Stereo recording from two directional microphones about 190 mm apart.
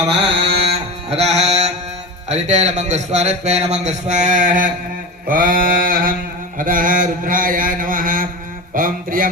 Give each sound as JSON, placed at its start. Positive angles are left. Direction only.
{"t": 0.1, "sound": "a man's voice", "side_deg": -30}
{"t": 1.1, "sound": "music", "side_deg": -35}
{"t": 2.3, "sound": "a man's voice", "side_deg": -35}
{"t": 5.3, "sound": "mantra", "side_deg": -45}